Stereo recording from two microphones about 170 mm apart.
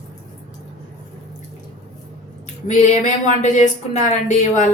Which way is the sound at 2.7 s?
45° left (ahead or behind).